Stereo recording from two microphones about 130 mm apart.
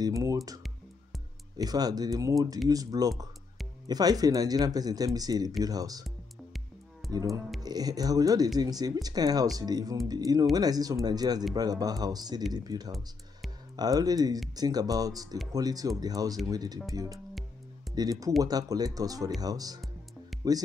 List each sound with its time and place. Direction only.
0.0 s speech: 25° right (ahead or behind)
1.6 s speech: 30° right (ahead or behind)
7.0 s music: centre (ahead or behind)
7.6 s speech: 30° right (ahead or behind)